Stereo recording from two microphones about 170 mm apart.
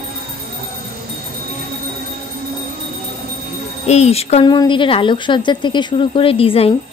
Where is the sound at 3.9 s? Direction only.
40° left (ahead or behind).